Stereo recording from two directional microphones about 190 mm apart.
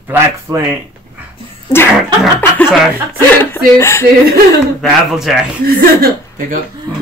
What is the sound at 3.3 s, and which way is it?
Speech, 10° left (ahead or behind).